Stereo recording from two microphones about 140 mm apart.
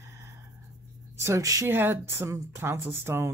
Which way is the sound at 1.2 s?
20° right (ahead or behind).